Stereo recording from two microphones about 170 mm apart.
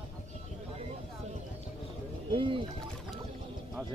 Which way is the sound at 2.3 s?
30° right (ahead or behind).